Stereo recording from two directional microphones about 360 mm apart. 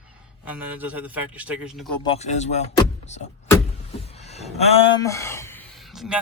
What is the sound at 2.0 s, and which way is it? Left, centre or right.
Speech, centre.